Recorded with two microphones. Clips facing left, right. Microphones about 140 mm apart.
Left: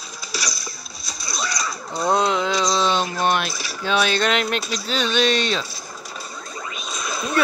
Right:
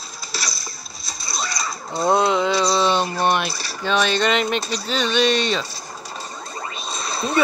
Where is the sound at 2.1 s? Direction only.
Centre (ahead or behind).